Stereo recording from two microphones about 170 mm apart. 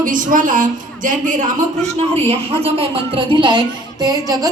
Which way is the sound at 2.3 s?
35° right (ahead or behind).